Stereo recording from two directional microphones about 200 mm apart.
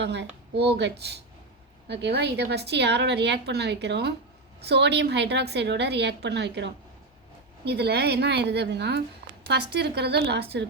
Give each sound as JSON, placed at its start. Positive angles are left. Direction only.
{"t": 0.0, "sound": "a woman's voice", "side_deg": -60}